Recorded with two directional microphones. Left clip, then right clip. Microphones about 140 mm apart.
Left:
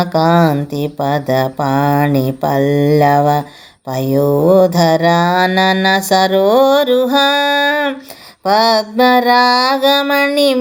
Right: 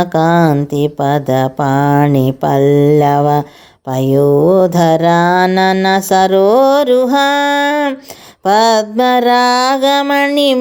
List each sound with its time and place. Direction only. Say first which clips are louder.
0.0 s mantra: right 1 dB; 50° right (ahead or behind)